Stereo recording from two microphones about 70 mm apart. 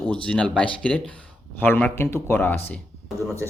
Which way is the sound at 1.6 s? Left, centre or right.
Left.